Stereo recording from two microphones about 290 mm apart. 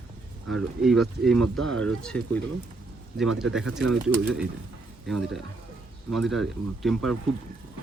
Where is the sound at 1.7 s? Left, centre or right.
Right.